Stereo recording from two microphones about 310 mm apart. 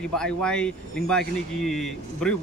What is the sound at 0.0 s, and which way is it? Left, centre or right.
Speech, centre.